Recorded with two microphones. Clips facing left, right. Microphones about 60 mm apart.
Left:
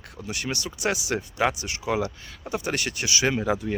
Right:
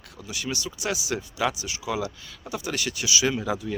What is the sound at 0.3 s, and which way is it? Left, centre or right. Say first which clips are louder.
Speech: left 1 dB; left.